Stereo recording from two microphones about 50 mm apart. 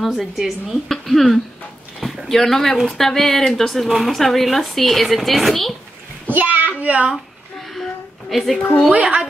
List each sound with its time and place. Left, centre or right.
0.0 s speech: centre
0.8 s speech: centre
6.2 s child singing: right
8.3 s speech: centre
8.9 s speech: right